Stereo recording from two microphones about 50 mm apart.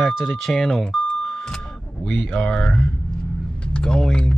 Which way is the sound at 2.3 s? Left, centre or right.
Centre.